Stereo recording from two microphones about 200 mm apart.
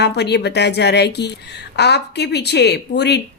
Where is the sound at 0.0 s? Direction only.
55° left (ahead or behind).